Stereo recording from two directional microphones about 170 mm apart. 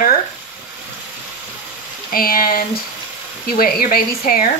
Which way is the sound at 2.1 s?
60° left (ahead or behind).